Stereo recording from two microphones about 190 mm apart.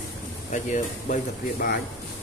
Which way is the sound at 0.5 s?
40° left (ahead or behind).